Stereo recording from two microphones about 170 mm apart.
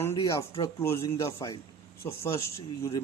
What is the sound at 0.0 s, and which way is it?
A man's voice, 15° left (ahead or behind).